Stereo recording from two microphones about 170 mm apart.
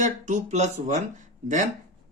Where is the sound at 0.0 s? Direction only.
45° right (ahead or behind).